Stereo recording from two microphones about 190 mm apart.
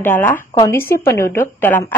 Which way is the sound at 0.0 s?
10° left (ahead or behind).